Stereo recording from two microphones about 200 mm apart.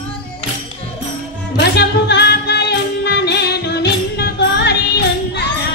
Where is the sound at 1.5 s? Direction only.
55° left (ahead or behind).